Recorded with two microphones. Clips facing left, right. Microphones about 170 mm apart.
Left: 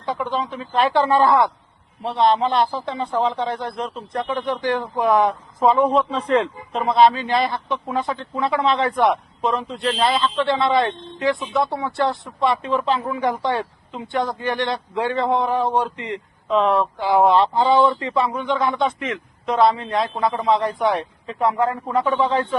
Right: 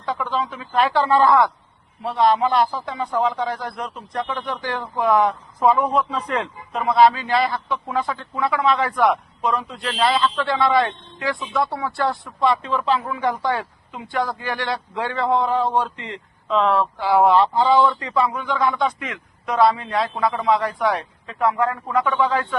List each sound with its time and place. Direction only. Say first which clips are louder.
0.0 s speech: even; 20° left (ahead or behind)